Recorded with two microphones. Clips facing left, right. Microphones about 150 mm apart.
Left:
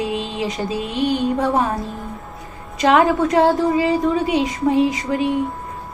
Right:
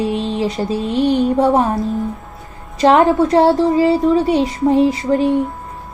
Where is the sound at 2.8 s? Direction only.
35° right (ahead or behind).